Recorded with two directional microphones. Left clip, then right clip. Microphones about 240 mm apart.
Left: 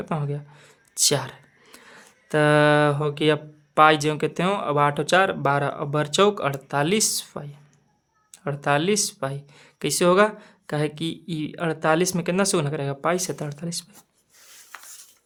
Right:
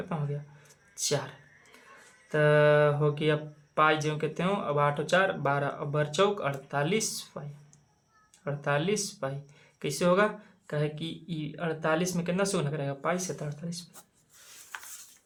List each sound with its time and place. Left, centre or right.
0.0 s speech: left
8.4 s speech: left